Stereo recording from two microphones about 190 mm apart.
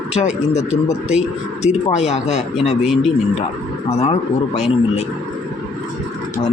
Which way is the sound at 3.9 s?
35° left (ahead or behind).